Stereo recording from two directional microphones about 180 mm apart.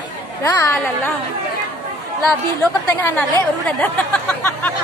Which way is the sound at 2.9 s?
10° left (ahead or behind).